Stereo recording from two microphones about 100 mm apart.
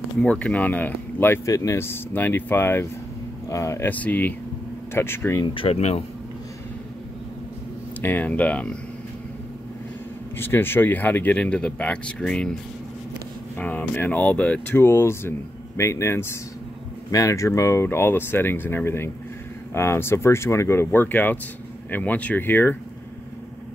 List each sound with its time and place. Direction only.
0.2 s speech: 10° left (ahead or behind)
1.4 s speech: 35° left (ahead or behind)
3.9 s speech: 15° left (ahead or behind)
5.4 s speech: 60° left (ahead or behind); by 6.0 s 90° left
8.0 s speech: 20° left (ahead or behind)
10.3 s speech: 20° left (ahead or behind)
13.6 s speech: 20° left (ahead or behind)